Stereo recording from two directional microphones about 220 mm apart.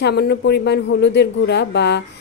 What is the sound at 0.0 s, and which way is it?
A woman's voice, 50° left (ahead or behind).